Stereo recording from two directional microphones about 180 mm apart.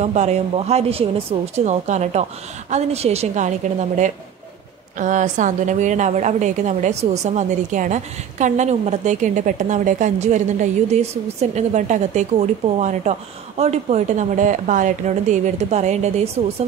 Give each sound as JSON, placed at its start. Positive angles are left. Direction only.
{"t": 0.0, "sound": "a woman's voice", "side_deg": -40}